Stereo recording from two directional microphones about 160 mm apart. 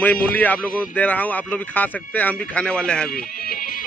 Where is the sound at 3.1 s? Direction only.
65° left (ahead or behind).